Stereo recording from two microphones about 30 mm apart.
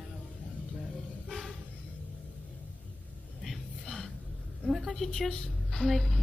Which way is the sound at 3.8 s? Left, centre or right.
Centre.